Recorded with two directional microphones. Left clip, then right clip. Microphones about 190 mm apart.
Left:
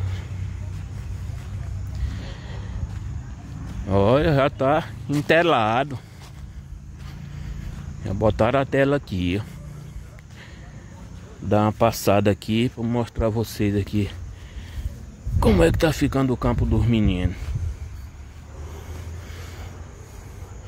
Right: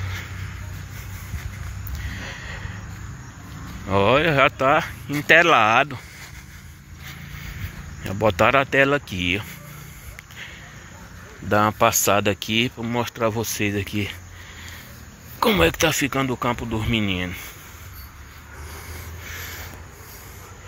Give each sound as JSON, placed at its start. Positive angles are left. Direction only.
{"t": 2.2, "sound": "a sound", "side_deg": 20}
{"t": 3.8, "sound": "speech", "side_deg": 25}
{"t": 8.0, "sound": "speech", "side_deg": 15}
{"t": 11.4, "sound": "speech", "side_deg": 20}
{"t": 15.4, "sound": "speech", "side_deg": 25}